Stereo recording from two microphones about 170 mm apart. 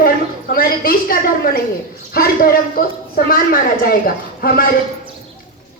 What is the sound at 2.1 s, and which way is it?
A woman's voice, 60° left (ahead or behind).